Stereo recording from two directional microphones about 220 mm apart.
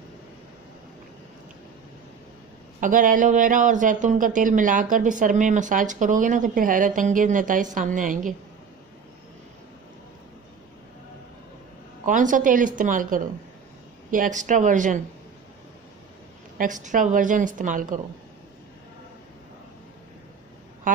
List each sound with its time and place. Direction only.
2.8 s speech: 35° right (ahead or behind)
12.1 s speech: 35° right (ahead or behind)
16.5 s speech: 35° right (ahead or behind)
20.9 s speech: 35° right (ahead or behind)